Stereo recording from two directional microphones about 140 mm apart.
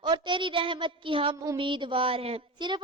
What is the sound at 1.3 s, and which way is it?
Speech, 20° right (ahead or behind).